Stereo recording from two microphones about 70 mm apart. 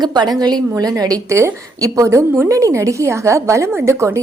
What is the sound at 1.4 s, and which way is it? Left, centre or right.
A woman's voice, right.